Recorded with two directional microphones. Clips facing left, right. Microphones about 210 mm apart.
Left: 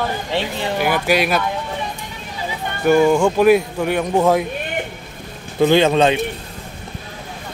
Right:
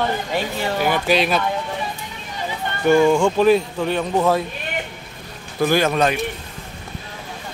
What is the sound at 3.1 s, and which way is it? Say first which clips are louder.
Speech: left 2 dB; 5° left (ahead or behind).